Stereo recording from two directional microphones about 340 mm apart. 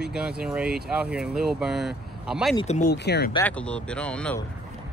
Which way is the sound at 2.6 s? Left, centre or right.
Left.